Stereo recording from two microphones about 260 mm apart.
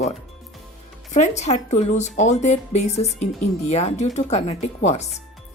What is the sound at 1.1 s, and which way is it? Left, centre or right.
A woman's voice, left.